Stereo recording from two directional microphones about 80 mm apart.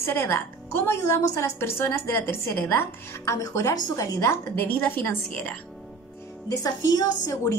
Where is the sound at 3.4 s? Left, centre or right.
Left.